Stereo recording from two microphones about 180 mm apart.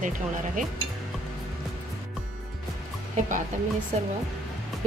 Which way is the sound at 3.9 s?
40° right (ahead or behind).